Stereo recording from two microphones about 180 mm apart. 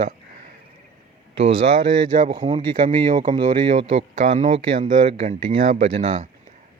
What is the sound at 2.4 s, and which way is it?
Speech, 40° right (ahead or behind).